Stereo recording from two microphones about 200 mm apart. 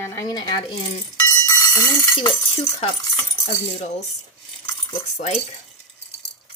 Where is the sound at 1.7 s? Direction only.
25° left (ahead or behind).